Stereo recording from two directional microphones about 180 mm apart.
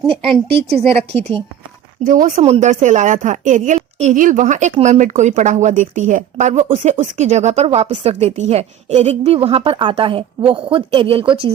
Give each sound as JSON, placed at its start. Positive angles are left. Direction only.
{"t": 0.1, "sound": "a woman's voice", "side_deg": -30}
{"t": 0.4, "sound": "a woman's voice", "side_deg": -65}
{"t": 0.8, "sound": "a woman's voice", "side_deg": -35}
{"t": 2.0, "sound": "a woman's voice", "side_deg": -45}